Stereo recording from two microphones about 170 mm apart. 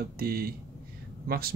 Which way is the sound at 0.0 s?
60° right (ahead or behind).